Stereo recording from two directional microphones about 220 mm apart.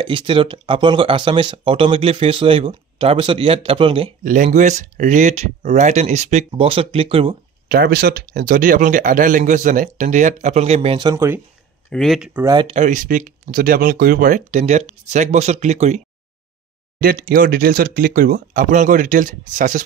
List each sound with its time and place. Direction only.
0.0 s speech: 20° right (ahead or behind)
4.2 s speech: 35° right (ahead or behind)
7.6 s speech: 45° right (ahead or behind); by 11.4 s 10° right (ahead or behind)
11.9 s speech: centre (ahead or behind)
12.4 s speech: 25° right (ahead or behind)
17.0 s speech: 40° right (ahead or behind)